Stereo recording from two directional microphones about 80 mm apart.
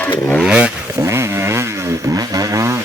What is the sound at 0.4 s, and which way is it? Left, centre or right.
Vehicle, centre.